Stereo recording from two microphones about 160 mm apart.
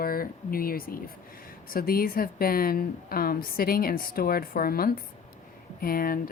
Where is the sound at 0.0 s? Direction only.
65° left (ahead or behind).